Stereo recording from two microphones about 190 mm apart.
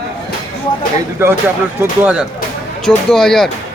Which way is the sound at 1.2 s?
15° right (ahead or behind).